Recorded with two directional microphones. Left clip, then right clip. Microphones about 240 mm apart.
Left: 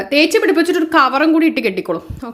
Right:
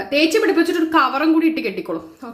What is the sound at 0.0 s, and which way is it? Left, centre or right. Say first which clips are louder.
A woman's voice: left 3 dB; left.